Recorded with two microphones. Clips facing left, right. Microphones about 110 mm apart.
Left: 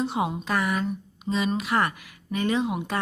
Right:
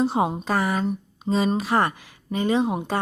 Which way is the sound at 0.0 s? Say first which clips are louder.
Right 5 dB; 35° right (ahead or behind).